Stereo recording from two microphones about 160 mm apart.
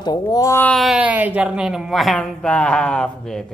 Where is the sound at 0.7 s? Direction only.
5° right (ahead or behind).